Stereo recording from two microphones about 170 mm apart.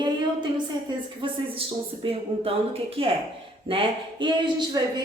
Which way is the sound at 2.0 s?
35° right (ahead or behind).